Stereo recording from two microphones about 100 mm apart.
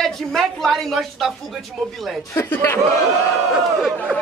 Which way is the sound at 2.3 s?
20° left (ahead or behind).